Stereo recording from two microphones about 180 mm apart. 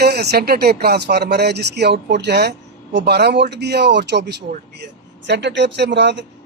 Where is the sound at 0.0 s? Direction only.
65° right (ahead or behind).